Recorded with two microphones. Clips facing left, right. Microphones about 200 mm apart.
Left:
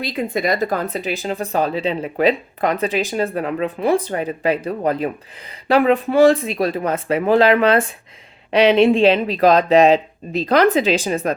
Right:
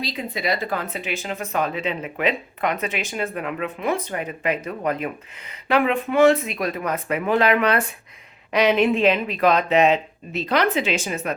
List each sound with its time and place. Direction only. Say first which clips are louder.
0.0 s speech: left 6 dB; 55° left (ahead or behind); by 11.3 s 35° left (ahead or behind)